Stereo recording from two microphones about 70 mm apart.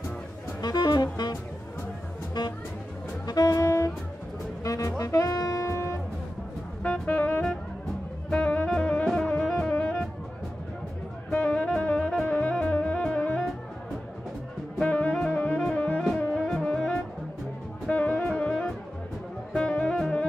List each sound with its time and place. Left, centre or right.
0.6 s saxophone: left
3.3 s saxophone: left
3.6 s music: left
4.6 s saxophone: left
6.8 s music: centre
11.2 s saxophone: centre
14.8 s music: centre
16.4 s music: centre